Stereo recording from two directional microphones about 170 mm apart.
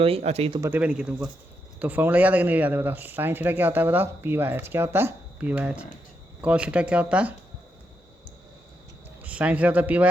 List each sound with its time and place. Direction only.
0.0 s speech: 35° right (ahead or behind)
0.6 s speech: 10° right (ahead or behind)
9.2 s speech: 5° right (ahead or behind)